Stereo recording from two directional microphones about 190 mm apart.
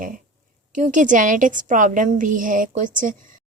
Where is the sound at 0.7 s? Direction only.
40° right (ahead or behind).